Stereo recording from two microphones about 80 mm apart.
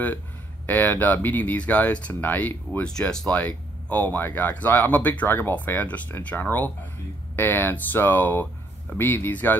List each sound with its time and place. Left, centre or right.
0.7 s speech: left
3.0 s speech: centre
3.3 s speech: left